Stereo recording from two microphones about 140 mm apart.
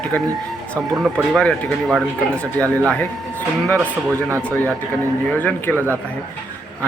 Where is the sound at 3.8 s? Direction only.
20° right (ahead or behind).